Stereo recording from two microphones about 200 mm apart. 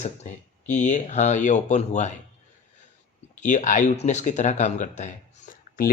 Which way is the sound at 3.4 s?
40° left (ahead or behind).